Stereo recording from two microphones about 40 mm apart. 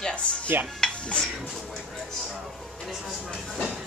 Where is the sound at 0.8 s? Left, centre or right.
Centre.